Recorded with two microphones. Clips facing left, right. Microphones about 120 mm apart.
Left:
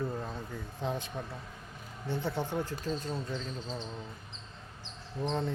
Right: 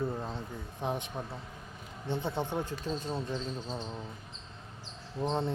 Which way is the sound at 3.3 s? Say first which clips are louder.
Right 2 dB; 15° right (ahead or behind).